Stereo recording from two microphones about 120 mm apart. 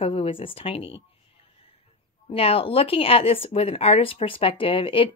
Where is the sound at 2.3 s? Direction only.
55° left (ahead or behind).